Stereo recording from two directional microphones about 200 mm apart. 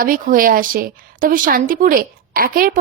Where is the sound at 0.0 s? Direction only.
45° right (ahead or behind).